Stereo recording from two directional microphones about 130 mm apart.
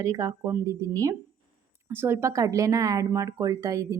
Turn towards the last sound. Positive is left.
turn(degrees=-25)  # may be behind; listen again after turning